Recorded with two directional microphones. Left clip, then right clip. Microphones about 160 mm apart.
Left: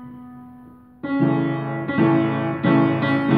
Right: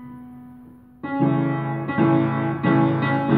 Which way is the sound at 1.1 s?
25° left (ahead or behind).